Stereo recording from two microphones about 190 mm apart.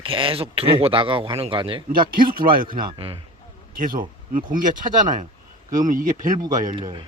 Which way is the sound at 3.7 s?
50° right (ahead or behind).